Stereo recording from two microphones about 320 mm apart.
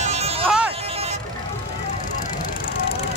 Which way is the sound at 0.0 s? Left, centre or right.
Centre.